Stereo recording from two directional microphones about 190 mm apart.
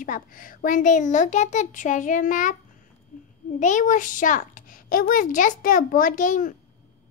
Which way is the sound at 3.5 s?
40° left (ahead or behind).